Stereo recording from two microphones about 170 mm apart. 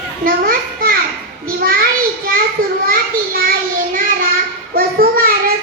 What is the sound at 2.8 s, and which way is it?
Children playing, 55° right (ahead or behind).